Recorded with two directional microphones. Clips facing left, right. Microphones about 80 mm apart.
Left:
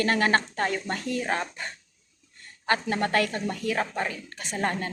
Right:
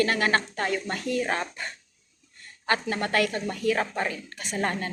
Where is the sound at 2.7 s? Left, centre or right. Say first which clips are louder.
Left 1 dB; left.